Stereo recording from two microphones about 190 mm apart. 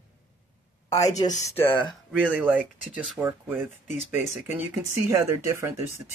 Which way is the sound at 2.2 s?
10° right (ahead or behind).